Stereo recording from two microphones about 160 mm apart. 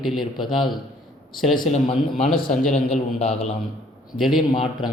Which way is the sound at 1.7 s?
40° left (ahead or behind).